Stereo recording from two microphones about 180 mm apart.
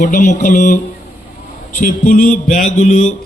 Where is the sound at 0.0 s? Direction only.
45° left (ahead or behind).